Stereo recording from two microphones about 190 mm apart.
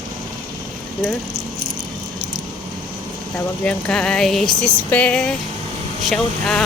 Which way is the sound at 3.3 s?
5° left (ahead or behind).